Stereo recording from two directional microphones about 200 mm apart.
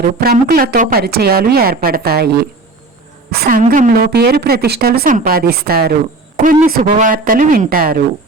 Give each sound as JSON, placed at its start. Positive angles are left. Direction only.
{"t": 0.0, "sound": "a woman's voice", "side_deg": -50}
{"t": 3.6, "sound": "a woman's voice", "side_deg": -40}